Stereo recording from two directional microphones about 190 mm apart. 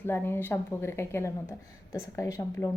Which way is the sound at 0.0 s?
10° left (ahead or behind).